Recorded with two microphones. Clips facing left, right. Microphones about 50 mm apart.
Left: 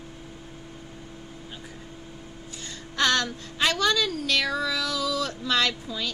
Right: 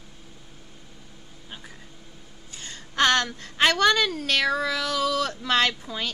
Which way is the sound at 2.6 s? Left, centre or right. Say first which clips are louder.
Right 3 dB; right.